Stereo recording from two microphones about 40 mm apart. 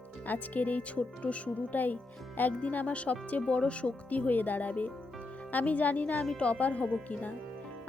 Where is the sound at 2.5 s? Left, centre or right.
Left.